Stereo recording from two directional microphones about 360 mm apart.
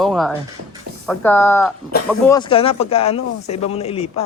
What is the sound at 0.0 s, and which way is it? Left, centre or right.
Speech, centre.